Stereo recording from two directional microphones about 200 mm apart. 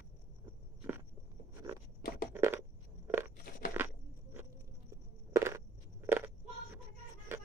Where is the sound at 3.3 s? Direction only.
45° left (ahead or behind).